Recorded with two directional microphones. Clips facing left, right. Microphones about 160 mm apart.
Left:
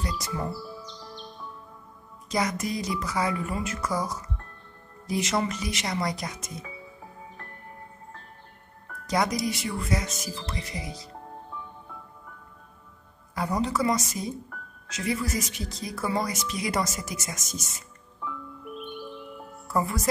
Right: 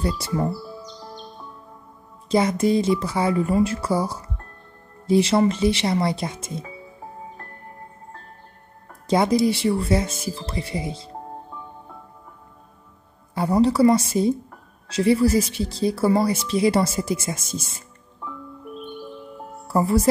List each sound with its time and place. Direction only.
0.0 s speech: 30° right (ahead or behind)
2.2 s speech: 30° right (ahead or behind)
8.8 s speech: 25° right (ahead or behind)
13.3 s speech: 30° right (ahead or behind)